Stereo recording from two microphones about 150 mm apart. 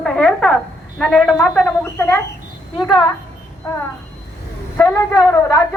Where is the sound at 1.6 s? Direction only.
20° left (ahead or behind).